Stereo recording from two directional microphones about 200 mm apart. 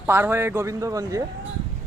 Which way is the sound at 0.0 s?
10° right (ahead or behind).